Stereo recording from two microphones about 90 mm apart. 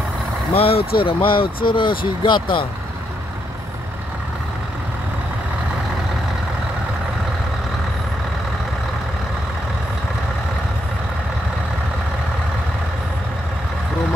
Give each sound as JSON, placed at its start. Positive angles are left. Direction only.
{"t": 0.6, "sound": "speech", "side_deg": 90}